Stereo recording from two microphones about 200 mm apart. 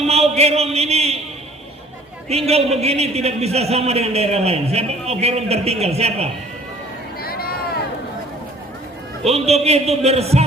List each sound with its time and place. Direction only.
0.0 s speech: 30° right (ahead or behind)
2.3 s a man's voice: 30° right (ahead or behind)
7.2 s vehicle: 50° left (ahead or behind)
9.2 s a man's voice: 30° right (ahead or behind)